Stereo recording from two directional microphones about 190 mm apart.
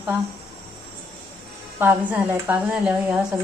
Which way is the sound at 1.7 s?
10° right (ahead or behind).